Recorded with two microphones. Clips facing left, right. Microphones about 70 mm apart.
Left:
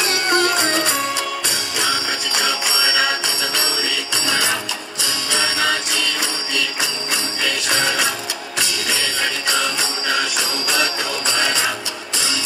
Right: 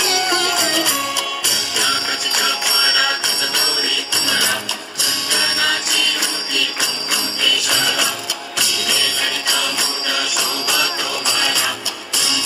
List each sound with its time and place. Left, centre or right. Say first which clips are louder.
0.0 s music: left 1 dB; left
1.5 s jingle bell: right 1 dB; left